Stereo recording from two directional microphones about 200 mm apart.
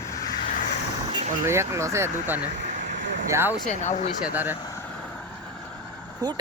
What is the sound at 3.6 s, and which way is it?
Speech, 35° left (ahead or behind).